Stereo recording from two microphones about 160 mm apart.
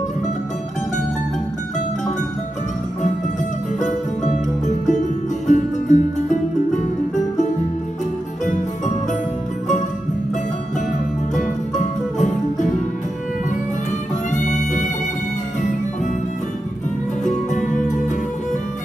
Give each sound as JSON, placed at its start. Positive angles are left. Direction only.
{"t": 3.8, "sound": "music", "side_deg": 50}
{"t": 11.3, "sound": "music", "side_deg": 50}
{"t": 14.3, "sound": "music", "side_deg": 50}